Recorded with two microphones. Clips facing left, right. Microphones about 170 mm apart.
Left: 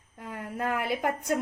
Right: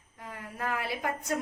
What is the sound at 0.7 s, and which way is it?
Speech, 55° left (ahead or behind).